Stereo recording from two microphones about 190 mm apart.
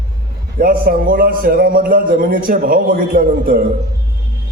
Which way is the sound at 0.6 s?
50° right (ahead or behind).